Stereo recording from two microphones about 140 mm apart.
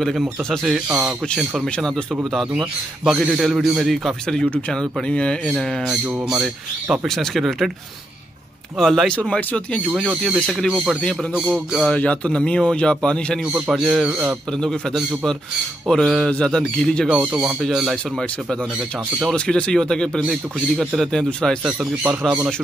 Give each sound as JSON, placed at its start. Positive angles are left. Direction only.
{"t": 0.0, "sound": "a man's voice", "side_deg": 0}
{"t": 2.5, "sound": "a man's voice", "side_deg": -10}
{"t": 8.7, "sound": "a man's voice", "side_deg": 5}
{"t": 13.5, "sound": "a man's voice", "side_deg": -5}
{"t": 17.3, "sound": "a man's voice", "side_deg": -5}
{"t": 19.3, "sound": "a man's voice", "side_deg": 5}